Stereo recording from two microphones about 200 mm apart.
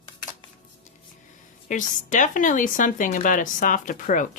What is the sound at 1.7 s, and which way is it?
Speech, 40° left (ahead or behind).